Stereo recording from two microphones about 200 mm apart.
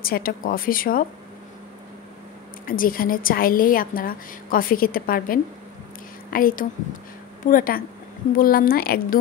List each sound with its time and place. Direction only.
0.0 s a woman's voice: 45° left (ahead or behind)
2.6 s a woman's voice: 45° left (ahead or behind)